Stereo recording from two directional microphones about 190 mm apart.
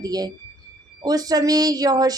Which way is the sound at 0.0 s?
20° right (ahead or behind).